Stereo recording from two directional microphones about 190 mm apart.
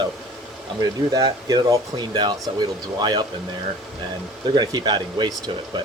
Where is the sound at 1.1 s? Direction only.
20° right (ahead or behind).